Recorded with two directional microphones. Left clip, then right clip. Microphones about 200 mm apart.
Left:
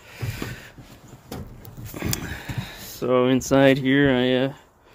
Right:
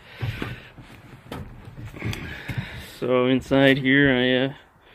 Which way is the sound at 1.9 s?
25° left (ahead or behind).